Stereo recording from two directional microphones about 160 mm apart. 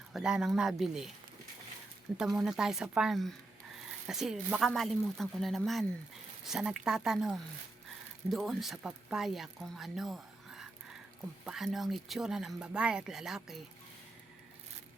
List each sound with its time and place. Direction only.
0.1 s speech: 5° right (ahead or behind)
2.1 s speech: 5° right (ahead or behind)